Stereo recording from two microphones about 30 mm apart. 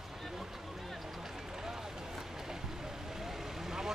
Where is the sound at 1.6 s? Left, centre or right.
Centre.